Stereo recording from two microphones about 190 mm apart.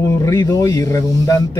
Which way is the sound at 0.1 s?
15° left (ahead or behind).